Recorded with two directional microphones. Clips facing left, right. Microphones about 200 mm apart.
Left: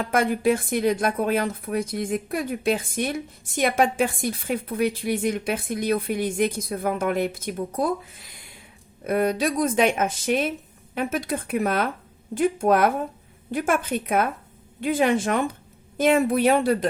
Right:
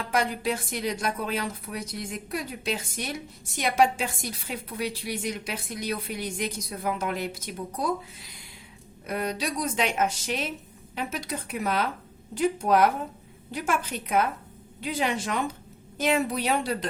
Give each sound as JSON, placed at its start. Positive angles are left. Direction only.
{"t": 0.0, "sound": "speech", "side_deg": 50}
{"t": 9.0, "sound": "speech", "side_deg": 50}